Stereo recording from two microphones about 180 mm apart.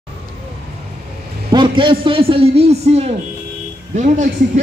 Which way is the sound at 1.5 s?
25° right (ahead or behind).